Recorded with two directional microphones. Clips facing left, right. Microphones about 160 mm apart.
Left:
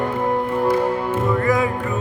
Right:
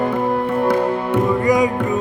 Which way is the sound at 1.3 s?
15° right (ahead or behind).